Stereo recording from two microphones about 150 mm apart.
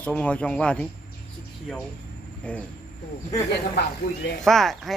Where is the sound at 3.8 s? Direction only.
90° left.